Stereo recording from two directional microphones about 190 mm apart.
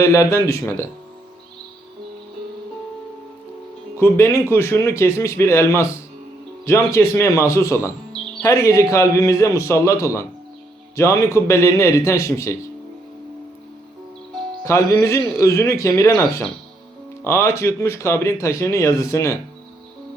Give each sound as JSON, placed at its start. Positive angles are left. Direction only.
{"t": 0.0, "sound": "speech", "side_deg": 15}
{"t": 3.9, "sound": "speech", "side_deg": 15}
{"t": 14.6, "sound": "speech", "side_deg": 15}